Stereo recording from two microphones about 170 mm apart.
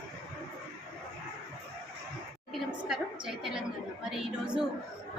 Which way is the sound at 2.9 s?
5° right (ahead or behind).